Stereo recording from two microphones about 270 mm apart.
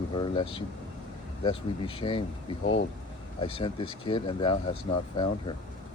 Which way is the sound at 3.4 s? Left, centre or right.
Centre.